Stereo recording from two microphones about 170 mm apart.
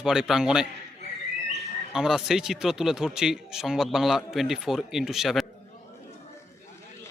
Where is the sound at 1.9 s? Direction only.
5° right (ahead or behind).